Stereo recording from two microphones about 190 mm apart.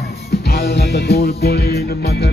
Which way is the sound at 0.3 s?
60° left (ahead or behind).